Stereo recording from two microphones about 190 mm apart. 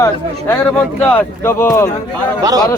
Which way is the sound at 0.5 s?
10° left (ahead or behind).